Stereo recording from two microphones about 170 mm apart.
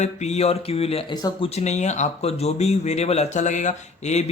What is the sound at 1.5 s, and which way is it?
Speech, 40° left (ahead or behind).